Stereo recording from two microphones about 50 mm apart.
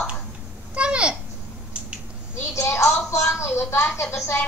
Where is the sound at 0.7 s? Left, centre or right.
Right.